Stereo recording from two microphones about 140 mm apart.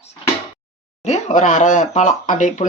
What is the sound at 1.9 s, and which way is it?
Speech, 60° left (ahead or behind).